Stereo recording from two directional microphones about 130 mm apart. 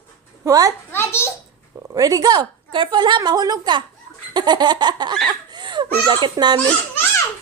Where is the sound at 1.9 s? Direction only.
30° right (ahead or behind).